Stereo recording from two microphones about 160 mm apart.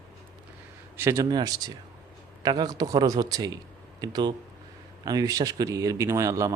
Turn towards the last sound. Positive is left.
turn(degrees=-20)  # may be behind; listen again after turning